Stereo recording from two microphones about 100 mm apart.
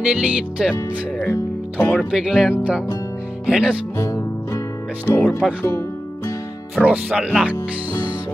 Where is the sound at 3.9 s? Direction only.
30° left (ahead or behind).